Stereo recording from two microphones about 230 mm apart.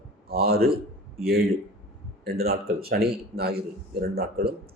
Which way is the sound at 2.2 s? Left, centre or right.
Right.